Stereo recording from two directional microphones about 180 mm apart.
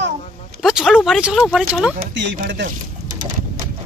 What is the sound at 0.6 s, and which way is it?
Speech, 5° right (ahead or behind).